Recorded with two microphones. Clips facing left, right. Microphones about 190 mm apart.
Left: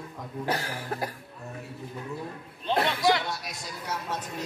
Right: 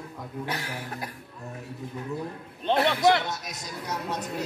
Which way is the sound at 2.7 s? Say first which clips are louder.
Right 3 dB; 60° right (ahead or behind).